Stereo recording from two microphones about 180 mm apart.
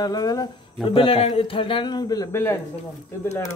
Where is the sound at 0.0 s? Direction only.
20° left (ahead or behind).